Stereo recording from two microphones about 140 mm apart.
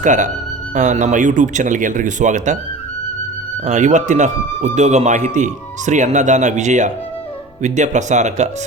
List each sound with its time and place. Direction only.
0.0 s a man's voice: 60° right (ahead or behind)
3.7 s a man's voice: 60° right (ahead or behind)